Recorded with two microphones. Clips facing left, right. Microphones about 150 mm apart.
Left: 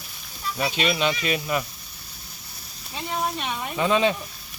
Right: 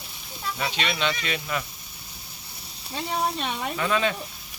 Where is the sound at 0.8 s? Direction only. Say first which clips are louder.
Left 4 dB; 15° left (ahead or behind).